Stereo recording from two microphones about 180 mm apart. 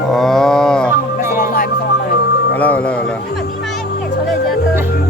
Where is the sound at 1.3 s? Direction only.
55° left (ahead or behind).